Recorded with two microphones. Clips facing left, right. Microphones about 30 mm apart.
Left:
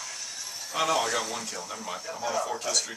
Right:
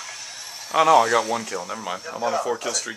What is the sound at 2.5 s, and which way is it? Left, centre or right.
Speech, right.